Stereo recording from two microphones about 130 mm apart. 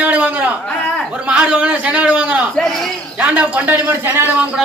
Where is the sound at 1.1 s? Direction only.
10° right (ahead or behind).